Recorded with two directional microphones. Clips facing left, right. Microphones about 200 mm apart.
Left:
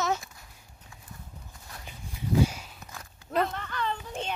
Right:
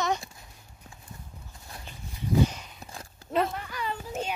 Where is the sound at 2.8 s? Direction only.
30° right (ahead or behind).